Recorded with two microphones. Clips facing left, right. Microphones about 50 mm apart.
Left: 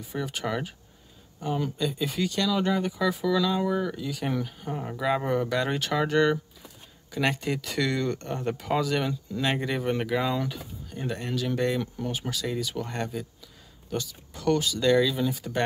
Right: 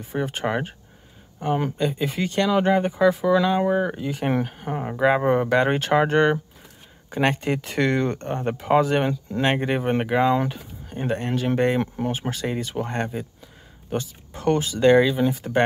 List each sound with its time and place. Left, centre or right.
0.0 s speech: right